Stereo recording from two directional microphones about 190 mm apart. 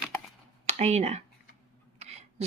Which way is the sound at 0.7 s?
35° right (ahead or behind).